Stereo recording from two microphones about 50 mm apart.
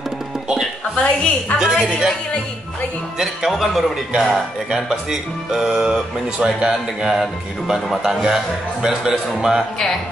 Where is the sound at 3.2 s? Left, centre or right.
Centre.